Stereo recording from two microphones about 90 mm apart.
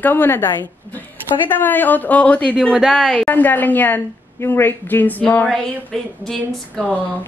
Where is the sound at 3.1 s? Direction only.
20° left (ahead or behind).